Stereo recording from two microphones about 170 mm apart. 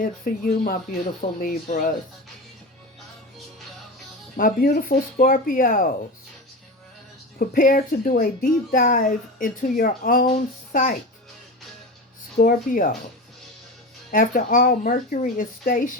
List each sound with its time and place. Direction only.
0.0 s speech: 55° left (ahead or behind)
4.4 s speech: 55° left (ahead or behind)
7.3 s speech: 55° left (ahead or behind)
12.4 s speech: 55° left (ahead or behind)
14.1 s speech: 55° left (ahead or behind)